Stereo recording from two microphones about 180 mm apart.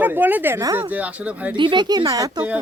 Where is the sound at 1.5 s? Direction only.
25° right (ahead or behind).